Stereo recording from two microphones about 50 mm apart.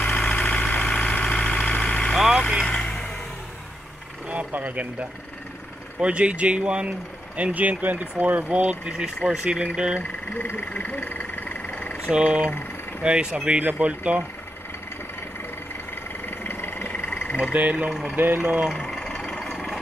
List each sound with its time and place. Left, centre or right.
0.0 s vehicle: left
4.3 s vehicle: right
5.9 s speech: right
8.9 s speech: centre
10.3 s a sound: left
12.1 s speech: centre
15.9 s vehicle: left
16.9 s frog: left
17.5 s speech: right
18.1 s speech: right
18.8 s a sound: centre
19.4 s a sound: centre